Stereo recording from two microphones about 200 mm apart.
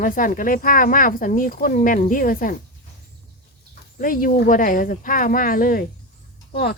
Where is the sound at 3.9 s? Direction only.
45° left (ahead or behind).